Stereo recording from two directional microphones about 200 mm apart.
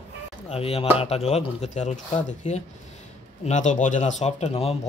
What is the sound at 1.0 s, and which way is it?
Speech, 30° left (ahead or behind).